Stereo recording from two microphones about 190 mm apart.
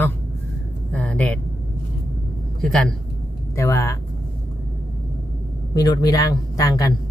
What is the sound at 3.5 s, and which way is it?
Speech, 15° left (ahead or behind).